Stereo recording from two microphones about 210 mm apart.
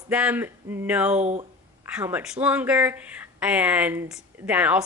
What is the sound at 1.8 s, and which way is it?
A woman's voice, 5° right (ahead or behind).